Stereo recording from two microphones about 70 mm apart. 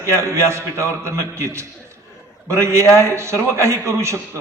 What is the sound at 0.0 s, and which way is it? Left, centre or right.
A man's voice, right.